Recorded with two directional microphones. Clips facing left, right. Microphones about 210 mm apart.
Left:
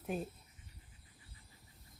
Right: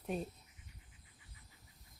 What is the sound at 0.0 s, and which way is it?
Speech, centre (ahead or behind).